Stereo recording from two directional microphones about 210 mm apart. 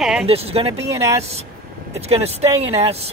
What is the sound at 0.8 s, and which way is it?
Speech, 15° right (ahead or behind).